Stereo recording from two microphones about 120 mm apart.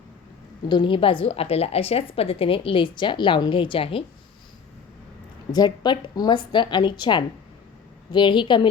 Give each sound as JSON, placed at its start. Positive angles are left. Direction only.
{"t": 0.7, "sound": "a woman's voice", "side_deg": 45}
{"t": 5.5, "sound": "a woman's voice", "side_deg": 35}